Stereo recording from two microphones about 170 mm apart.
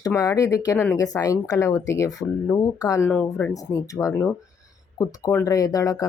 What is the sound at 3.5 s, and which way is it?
Speech, 20° left (ahead or behind).